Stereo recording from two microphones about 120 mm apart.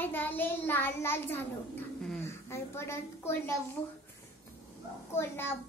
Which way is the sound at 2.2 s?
20° left (ahead or behind).